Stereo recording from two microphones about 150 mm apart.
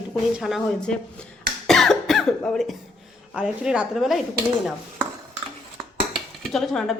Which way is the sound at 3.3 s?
5° right (ahead or behind).